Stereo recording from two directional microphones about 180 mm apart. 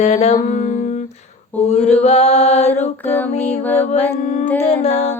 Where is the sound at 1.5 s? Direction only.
10° left (ahead or behind).